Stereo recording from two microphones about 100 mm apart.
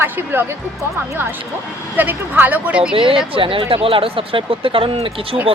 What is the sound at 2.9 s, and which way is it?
Speech, 60° right (ahead or behind).